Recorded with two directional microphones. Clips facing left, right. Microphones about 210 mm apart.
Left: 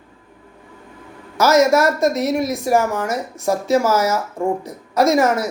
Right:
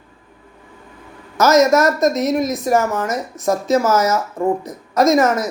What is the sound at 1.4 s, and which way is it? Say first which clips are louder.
Speech: right 1 dB; 10° left (ahead or behind).